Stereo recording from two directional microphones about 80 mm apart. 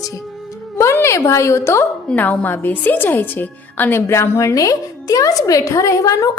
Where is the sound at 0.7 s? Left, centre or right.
Left.